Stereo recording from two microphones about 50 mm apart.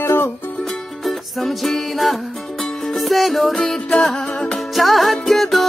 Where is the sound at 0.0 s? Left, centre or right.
Left.